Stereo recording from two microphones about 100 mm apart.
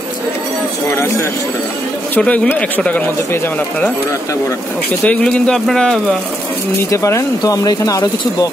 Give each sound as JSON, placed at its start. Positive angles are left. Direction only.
{"t": 2.1, "sound": "speech", "side_deg": 15}
{"t": 5.0, "sound": "speech", "side_deg": 10}
{"t": 6.9, "sound": "speech", "side_deg": 30}